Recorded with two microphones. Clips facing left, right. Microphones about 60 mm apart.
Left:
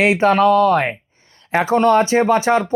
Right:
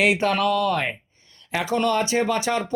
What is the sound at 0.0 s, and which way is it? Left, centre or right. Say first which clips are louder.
Speech: left 7 dB; left.